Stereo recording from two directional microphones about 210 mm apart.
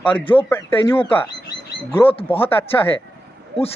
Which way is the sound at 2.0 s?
25° left (ahead or behind).